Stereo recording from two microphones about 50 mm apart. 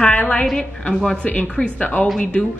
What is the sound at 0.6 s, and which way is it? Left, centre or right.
A woman's voice, centre.